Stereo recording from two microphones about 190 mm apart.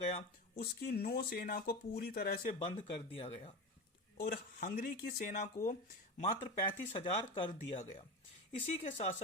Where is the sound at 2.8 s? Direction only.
30° left (ahead or behind).